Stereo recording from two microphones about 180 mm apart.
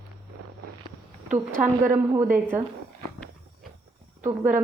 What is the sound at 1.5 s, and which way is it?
Speech, 45° right (ahead or behind).